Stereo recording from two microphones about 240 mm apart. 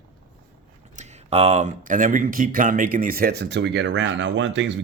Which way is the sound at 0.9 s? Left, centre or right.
Right.